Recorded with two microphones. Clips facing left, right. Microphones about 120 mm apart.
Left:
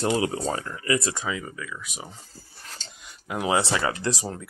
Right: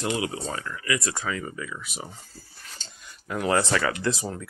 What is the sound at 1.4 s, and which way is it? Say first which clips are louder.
Speech: right 2 dB; centre (ahead or behind).